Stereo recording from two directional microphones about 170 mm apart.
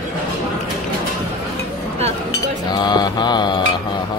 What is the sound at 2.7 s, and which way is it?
Mantra, 25° left (ahead or behind).